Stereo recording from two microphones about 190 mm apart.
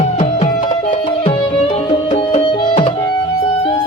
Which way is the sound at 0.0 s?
35° left (ahead or behind).